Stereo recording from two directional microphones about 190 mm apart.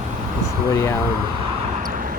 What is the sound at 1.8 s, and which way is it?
Vehicle, 45° right (ahead or behind).